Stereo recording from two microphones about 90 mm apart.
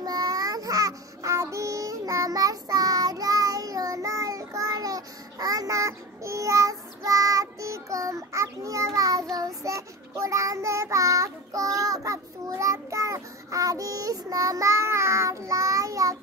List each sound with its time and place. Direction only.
0.0 s child singing: 45° right (ahead or behind)